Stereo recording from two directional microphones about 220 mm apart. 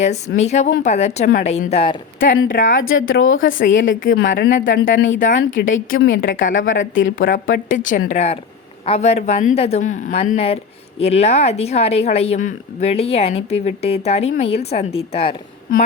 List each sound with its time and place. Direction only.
0.0 s a woman's voice: 30° left (ahead or behind)
2.2 s speech: 55° left (ahead or behind)
2.5 s a woman's voice: 35° left (ahead or behind)
2.7 s speech: 65° left (ahead or behind)
4.3 s a woman's voice: 40° left (ahead or behind)
4.9 s speech: 60° left (ahead or behind)
6.4 s a woman's voice: 35° left (ahead or behind)